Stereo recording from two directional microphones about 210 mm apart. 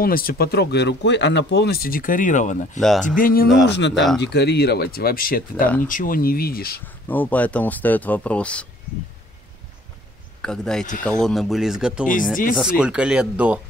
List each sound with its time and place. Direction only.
0.0 s speech: 45° left (ahead or behind)
2.8 s speech: centre (ahead or behind)
3.2 s speech: 40° left (ahead or behind)
3.6 s speech: 55° left (ahead or behind)
7.1 s speech: 10° left (ahead or behind)
10.4 s speech: 5° left (ahead or behind)